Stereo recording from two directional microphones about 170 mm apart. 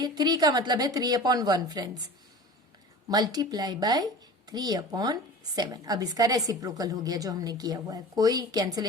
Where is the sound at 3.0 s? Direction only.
25° right (ahead or behind).